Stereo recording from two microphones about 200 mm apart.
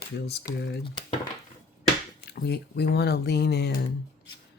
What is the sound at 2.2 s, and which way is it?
Speech, 55° left (ahead or behind).